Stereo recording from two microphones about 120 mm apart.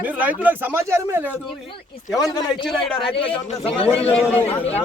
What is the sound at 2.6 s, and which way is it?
Speech, centre (ahead or behind).